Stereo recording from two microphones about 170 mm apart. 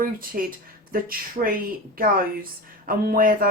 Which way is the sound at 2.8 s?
60° right (ahead or behind).